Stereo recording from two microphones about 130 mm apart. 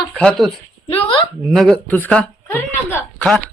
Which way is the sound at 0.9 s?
45° left (ahead or behind).